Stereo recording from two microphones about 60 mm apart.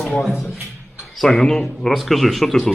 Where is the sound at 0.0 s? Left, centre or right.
Centre.